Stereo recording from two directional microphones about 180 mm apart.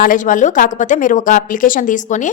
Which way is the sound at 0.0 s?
45° left (ahead or behind).